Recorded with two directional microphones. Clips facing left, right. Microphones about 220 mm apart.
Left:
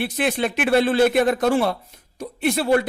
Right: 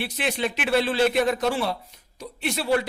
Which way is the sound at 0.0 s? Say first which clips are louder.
Left 5 dB; 50° left (ahead or behind).